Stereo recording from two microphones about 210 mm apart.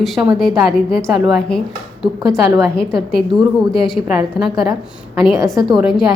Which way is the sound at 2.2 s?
15° right (ahead or behind).